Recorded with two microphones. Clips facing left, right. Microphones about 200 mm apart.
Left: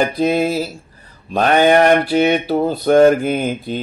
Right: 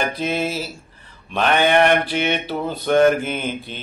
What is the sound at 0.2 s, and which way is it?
Mantra, 40° left (ahead or behind).